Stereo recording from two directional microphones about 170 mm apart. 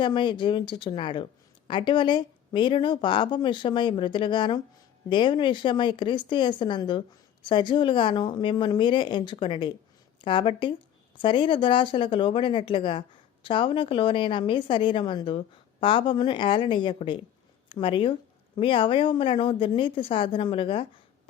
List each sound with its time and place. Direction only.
0.0 s speech: 30° left (ahead or behind)